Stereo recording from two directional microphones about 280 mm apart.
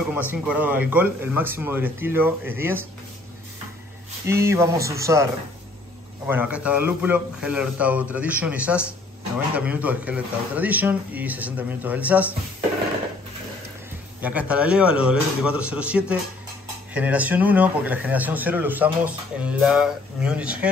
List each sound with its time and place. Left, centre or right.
0.3 s speech: centre
4.3 s speech: centre
14.2 s speech: centre